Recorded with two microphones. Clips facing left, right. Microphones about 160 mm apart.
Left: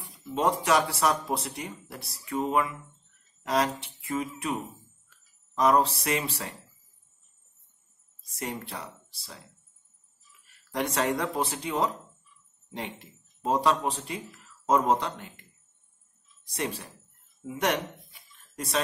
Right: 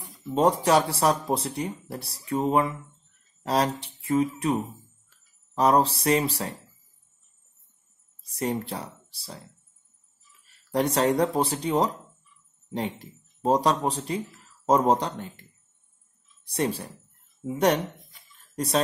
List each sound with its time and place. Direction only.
0.3 s speech: 35° right (ahead or behind)
8.4 s speech: 35° right (ahead or behind)
10.7 s speech: 35° right (ahead or behind)
16.4 s speech: 35° right (ahead or behind)